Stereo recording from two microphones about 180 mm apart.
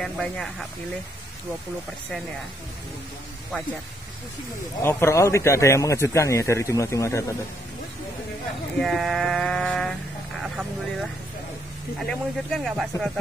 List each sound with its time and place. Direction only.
0.0 s speech: 5° left (ahead or behind)
4.8 s a man's voice: 15° left (ahead or behind)
8.7 s speech: centre (ahead or behind)
10.4 s vehicle: centre (ahead or behind)
12.1 s speech: centre (ahead or behind)